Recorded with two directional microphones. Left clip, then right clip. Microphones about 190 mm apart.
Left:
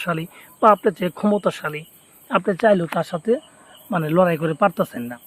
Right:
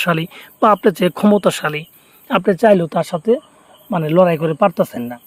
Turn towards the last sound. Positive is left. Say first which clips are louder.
# right 5 dB
turn(degrees=-25)  # may be behind; listen again after turning